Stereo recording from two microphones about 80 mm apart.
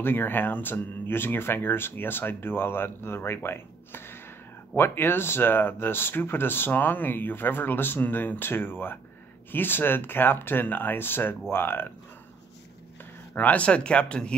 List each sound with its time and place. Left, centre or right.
0.0 s speech: left
13.3 s speech: left